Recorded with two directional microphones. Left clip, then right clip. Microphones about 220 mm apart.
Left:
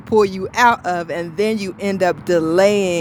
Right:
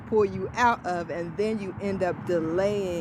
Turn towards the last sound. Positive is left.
turn(degrees=30)  # may be behind; listen again after turning